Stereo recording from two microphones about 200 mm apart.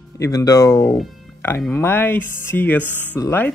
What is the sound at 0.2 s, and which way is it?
Speech, 15° left (ahead or behind).